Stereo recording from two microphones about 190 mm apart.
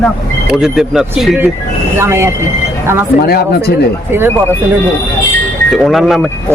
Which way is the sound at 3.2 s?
55° left (ahead or behind).